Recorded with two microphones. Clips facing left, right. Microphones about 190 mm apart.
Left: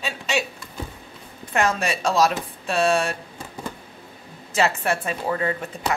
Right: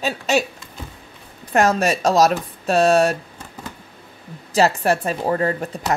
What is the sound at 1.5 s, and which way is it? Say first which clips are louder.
Speech: right 5 dB; 40° right (ahead or behind).